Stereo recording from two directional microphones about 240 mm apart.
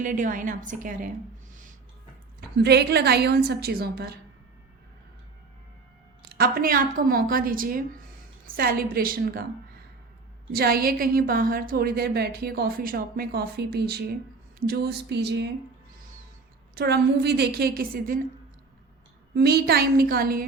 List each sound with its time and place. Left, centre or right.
0.0 s a woman's voice: right
2.6 s a woman's voice: right
6.3 s a woman's voice: right
10.5 s a woman's voice: right
14.7 s a sound: right
16.7 s a woman's voice: right
19.3 s a woman's voice: right